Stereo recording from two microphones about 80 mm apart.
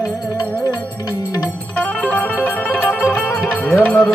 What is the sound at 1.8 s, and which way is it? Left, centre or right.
Music, left.